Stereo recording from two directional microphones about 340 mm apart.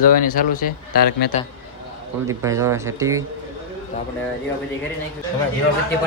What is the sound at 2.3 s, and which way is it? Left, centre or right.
Speech, centre.